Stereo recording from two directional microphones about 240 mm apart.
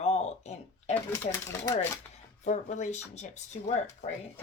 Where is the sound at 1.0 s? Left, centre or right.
Centre.